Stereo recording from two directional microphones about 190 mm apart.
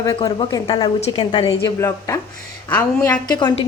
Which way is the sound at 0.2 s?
25° left (ahead or behind).